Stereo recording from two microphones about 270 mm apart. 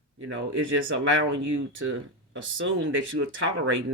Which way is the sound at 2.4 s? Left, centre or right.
Right.